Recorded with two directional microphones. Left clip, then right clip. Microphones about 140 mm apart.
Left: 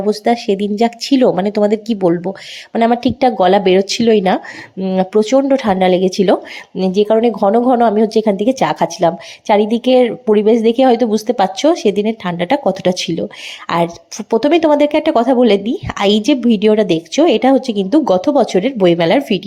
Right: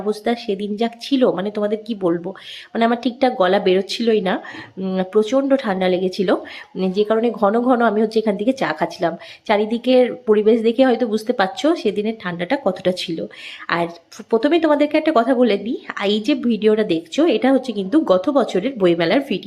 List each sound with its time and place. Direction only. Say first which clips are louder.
0.0 s speech: left 7 dB; 35° left (ahead or behind)